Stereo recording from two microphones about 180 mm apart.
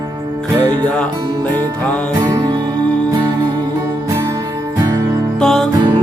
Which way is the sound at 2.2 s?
25° right (ahead or behind).